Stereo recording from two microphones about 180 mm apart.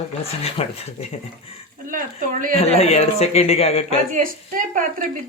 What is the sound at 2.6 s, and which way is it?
A man's voice, 35° left (ahead or behind).